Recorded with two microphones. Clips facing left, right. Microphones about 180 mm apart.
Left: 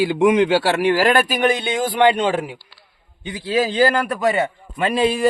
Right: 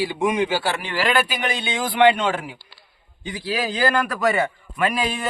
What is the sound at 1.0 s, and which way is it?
Speech, 45° left (ahead or behind).